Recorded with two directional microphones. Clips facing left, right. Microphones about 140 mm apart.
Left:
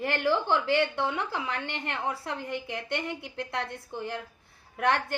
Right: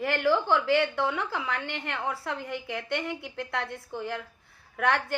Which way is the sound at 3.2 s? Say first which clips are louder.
Even; 15° right (ahead or behind).